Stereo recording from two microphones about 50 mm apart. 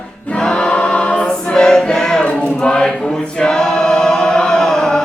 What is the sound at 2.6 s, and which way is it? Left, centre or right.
Choir, centre.